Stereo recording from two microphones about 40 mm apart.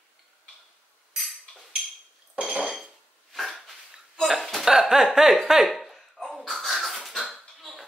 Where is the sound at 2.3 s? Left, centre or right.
Right.